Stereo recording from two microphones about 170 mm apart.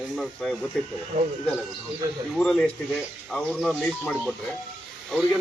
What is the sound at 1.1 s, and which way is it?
Speech, 30° right (ahead or behind).